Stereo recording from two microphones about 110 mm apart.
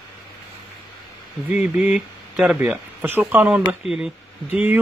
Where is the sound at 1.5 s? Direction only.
10° right (ahead or behind).